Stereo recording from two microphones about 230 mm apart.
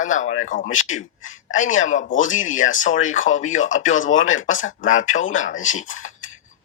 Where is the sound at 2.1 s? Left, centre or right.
Left.